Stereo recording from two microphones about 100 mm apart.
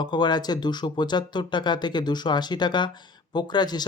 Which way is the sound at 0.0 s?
50° left (ahead or behind).